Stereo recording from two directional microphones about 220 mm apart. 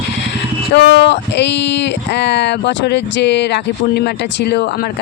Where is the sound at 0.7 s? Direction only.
55° left (ahead or behind).